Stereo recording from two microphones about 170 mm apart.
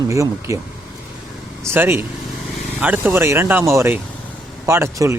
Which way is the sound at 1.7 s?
15° right (ahead or behind).